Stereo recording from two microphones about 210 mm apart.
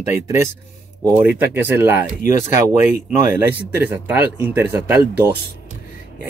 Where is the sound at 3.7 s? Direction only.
10° right (ahead or behind).